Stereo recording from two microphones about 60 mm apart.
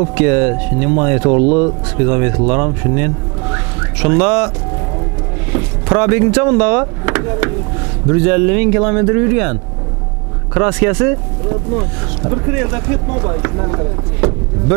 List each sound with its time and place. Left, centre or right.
0.0 s speech: centre
5.6 s speech: centre